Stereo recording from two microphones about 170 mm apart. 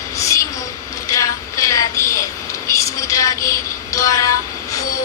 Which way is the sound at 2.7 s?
20° left (ahead or behind).